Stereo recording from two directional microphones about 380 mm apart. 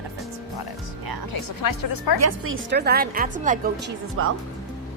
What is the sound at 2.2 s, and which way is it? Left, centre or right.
A woman's voice, right.